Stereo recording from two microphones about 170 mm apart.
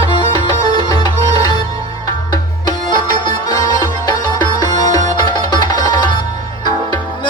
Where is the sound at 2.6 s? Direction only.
25° left (ahead or behind).